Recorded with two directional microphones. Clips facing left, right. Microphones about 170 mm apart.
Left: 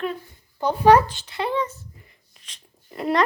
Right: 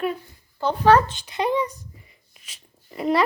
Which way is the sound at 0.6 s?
15° left (ahead or behind).